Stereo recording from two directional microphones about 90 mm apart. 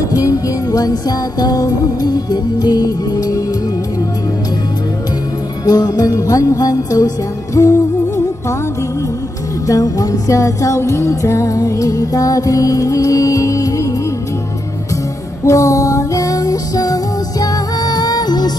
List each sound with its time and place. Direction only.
0.1 s music: 40° left (ahead or behind)
5.7 s music: 45° left (ahead or behind)
9.7 s music: 40° left (ahead or behind)
15.4 s music: 40° left (ahead or behind)